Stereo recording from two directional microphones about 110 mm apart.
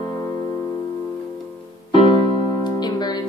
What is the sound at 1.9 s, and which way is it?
Music, 55° left (ahead or behind).